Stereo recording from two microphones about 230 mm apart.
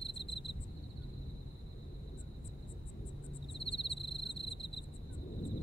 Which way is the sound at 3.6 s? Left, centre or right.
Left.